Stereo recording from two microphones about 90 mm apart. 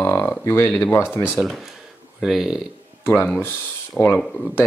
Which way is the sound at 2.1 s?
5° right (ahead or behind).